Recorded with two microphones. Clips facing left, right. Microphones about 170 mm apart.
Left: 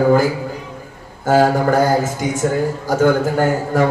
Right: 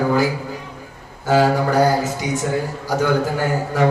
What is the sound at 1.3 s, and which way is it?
A man's voice, 45° left (ahead or behind).